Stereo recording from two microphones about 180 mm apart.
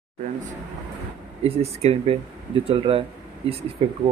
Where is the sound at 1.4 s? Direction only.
35° right (ahead or behind).